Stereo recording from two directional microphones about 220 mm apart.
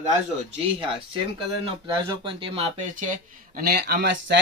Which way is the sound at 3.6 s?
45° right (ahead or behind).